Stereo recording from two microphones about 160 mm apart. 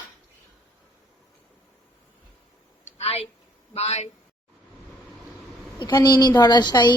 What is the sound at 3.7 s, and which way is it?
Speech, 40° left (ahead or behind).